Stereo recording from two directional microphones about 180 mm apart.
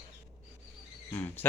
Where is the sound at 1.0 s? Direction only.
10° left (ahead or behind).